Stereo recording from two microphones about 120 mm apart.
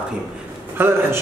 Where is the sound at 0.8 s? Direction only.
20° right (ahead or behind).